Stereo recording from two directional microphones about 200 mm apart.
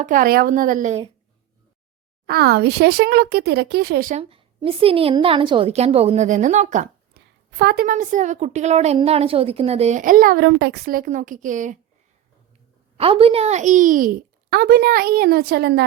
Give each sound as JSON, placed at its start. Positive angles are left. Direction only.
{"t": 0.0, "sound": "speech", "side_deg": -45}
{"t": 2.2, "sound": "speech", "side_deg": -50}
{"t": 4.1, "sound": "a woman's voice", "side_deg": -30}
{"t": 7.5, "sound": "a woman's voice", "side_deg": -55}
{"t": 13.0, "sound": "a woman's voice", "side_deg": -30}